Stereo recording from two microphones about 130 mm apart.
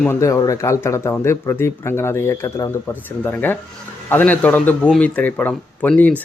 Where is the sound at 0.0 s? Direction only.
20° left (ahead or behind).